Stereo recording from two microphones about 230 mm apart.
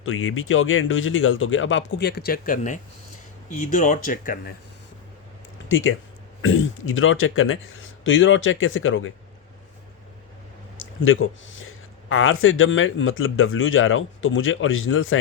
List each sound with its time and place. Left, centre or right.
0.0 s speech: left
5.6 s speech: left
10.8 s speech: left